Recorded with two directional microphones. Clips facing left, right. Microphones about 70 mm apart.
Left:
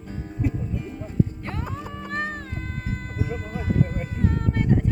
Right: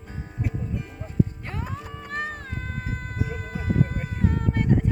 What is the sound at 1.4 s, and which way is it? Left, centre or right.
Music, centre.